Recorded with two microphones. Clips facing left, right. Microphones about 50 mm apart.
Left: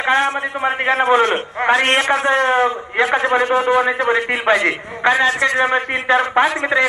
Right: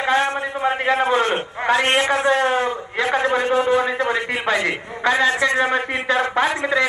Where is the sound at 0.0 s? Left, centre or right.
Left.